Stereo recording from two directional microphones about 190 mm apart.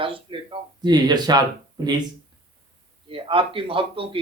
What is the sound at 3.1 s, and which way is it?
Speech, 25° right (ahead or behind).